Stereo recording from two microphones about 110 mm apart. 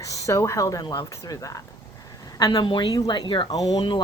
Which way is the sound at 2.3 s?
40° left (ahead or behind).